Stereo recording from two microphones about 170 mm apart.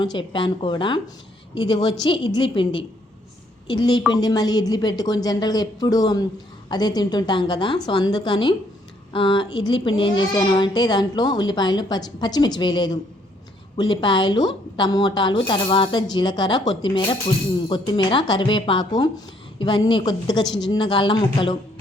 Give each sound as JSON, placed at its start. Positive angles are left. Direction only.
{"t": 0.0, "sound": "a child's voice", "side_deg": 25}